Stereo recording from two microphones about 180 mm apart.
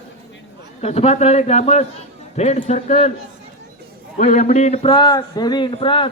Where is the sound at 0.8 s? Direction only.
35° left (ahead or behind).